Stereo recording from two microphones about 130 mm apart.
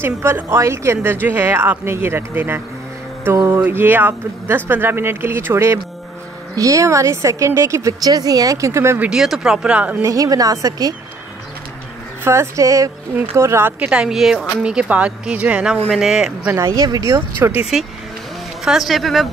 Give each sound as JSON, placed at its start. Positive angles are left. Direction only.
{"t": 0.0, "sound": "a woman's voice", "side_deg": -20}
{"t": 9.1, "sound": "speech", "side_deg": -5}
{"t": 10.0, "sound": "a woman's voice", "side_deg": -25}
{"t": 12.3, "sound": "a woman's voice", "side_deg": -20}
{"t": 16.5, "sound": "a woman's voice", "side_deg": -25}
{"t": 18.6, "sound": "speech", "side_deg": 0}